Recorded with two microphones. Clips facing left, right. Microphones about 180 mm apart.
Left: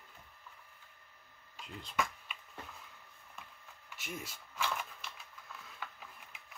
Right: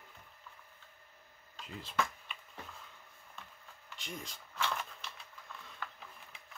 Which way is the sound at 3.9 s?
5° left (ahead or behind).